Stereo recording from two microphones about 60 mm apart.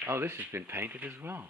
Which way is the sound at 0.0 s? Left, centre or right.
Right.